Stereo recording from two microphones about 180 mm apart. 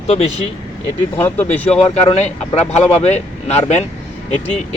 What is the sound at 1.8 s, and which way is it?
Speech, 35° left (ahead or behind).